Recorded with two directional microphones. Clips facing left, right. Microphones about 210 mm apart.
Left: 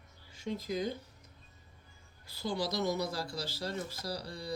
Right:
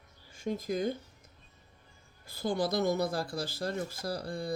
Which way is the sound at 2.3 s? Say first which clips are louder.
Right 4 dB; 50° right (ahead or behind).